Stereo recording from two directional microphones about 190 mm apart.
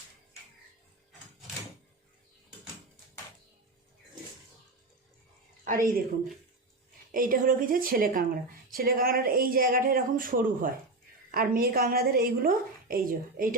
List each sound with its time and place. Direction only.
5.6 s a woman's voice: 45° right (ahead or behind)
7.1 s a woman's voice: 45° right (ahead or behind)